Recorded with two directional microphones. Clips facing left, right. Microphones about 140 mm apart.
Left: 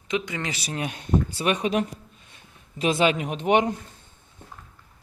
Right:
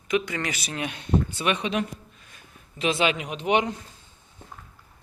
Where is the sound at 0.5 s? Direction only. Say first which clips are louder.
Left 1 dB; 35° left (ahead or behind).